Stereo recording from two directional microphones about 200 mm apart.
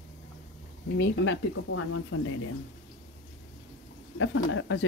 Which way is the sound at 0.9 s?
65° left (ahead or behind).